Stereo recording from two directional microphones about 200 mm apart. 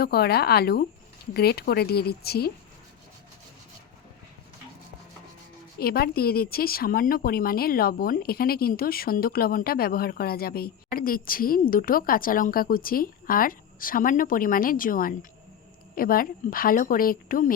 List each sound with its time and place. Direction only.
0.0 s speech: 50° left (ahead or behind)
5.8 s speech: 50° left (ahead or behind)